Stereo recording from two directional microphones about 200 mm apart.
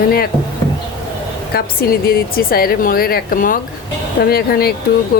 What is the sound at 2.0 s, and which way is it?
Speech, 50° left (ahead or behind).